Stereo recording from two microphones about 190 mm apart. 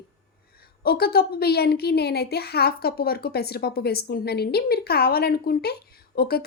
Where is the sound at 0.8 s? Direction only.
55° left (ahead or behind).